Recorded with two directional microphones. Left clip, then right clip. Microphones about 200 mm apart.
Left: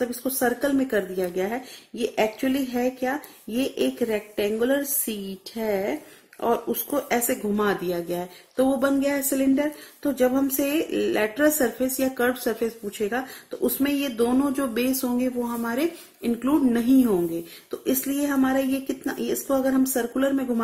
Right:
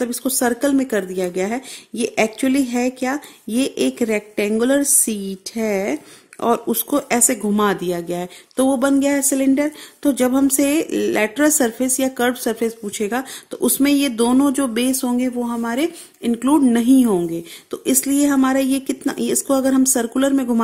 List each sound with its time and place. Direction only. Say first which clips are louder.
0.0 s speech: right 4 dB; 40° right (ahead or behind)